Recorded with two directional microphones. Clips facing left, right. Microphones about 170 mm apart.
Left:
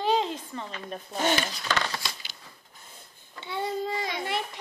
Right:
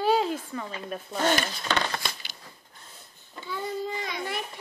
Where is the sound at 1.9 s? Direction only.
55° right (ahead or behind).